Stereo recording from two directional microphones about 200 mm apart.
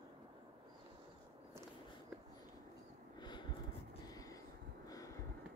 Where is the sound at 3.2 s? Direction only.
20° left (ahead or behind).